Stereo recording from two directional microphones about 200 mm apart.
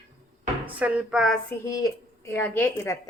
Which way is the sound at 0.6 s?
5° right (ahead or behind).